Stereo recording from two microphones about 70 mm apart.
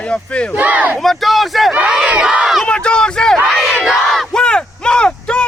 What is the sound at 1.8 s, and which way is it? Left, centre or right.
Battle cry, centre.